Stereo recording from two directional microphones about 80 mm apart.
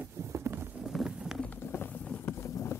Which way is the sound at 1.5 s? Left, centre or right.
Left.